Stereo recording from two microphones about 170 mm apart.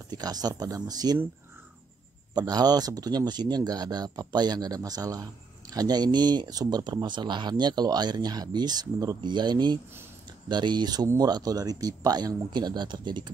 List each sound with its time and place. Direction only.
0.1 s speech: 25° right (ahead or behind)
2.3 s speech: 20° right (ahead or behind)